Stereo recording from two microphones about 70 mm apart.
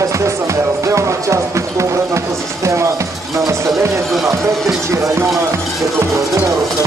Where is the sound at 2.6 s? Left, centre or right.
Right.